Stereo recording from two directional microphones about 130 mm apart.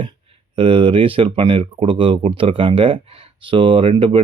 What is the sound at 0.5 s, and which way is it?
Speech, 40° right (ahead or behind).